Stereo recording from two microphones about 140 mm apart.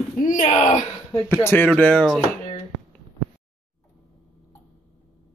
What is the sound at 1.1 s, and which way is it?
Speech, 15° left (ahead or behind).